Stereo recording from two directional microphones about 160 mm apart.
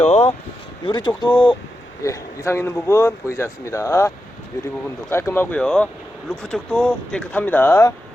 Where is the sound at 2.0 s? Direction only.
20° left (ahead or behind).